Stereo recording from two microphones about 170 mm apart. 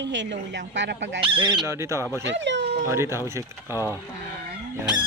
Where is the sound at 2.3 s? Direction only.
90° right.